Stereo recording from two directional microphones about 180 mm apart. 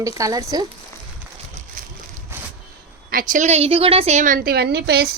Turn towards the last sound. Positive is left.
turn(degrees=-60)  # may be behind; listen again after turning